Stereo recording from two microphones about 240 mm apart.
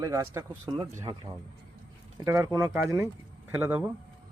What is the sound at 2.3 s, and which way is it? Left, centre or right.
Speech, centre.